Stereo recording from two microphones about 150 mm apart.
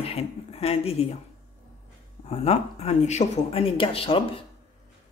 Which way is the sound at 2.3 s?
40° left (ahead or behind).